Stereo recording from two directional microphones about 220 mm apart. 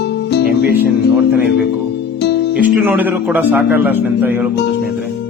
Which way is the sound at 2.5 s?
10° right (ahead or behind).